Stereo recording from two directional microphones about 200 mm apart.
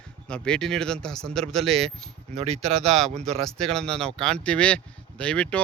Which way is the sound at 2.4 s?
30° right (ahead or behind).